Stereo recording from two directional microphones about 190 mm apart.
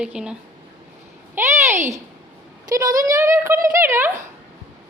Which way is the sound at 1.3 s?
10° right (ahead or behind).